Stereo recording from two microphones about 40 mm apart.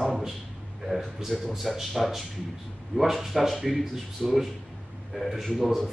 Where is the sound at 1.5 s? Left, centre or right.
Centre.